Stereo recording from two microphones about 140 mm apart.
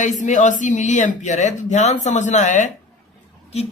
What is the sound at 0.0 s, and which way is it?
A woman's voice, 65° left (ahead or behind).